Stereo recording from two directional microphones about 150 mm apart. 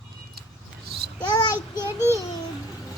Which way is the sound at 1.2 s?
30° left (ahead or behind).